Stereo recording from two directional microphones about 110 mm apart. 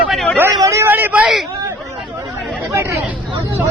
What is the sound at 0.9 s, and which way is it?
Vehicle, 20° right (ahead or behind).